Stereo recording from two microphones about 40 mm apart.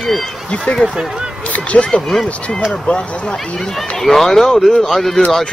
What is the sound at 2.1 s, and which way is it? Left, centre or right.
Speech, centre.